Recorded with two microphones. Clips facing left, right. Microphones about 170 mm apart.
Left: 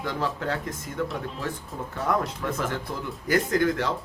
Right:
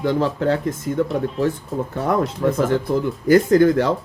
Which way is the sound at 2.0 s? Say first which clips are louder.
Right 7 dB; 35° right (ahead or behind).